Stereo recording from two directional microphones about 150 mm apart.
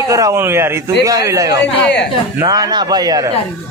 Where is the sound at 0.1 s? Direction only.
20° right (ahead or behind).